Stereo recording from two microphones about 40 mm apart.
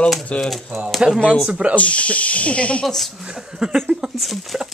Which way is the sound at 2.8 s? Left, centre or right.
Centre.